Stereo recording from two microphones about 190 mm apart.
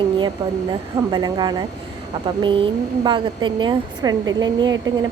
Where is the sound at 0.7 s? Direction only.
25° right (ahead or behind).